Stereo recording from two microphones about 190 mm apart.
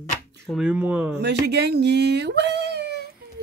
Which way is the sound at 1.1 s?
60° right (ahead or behind).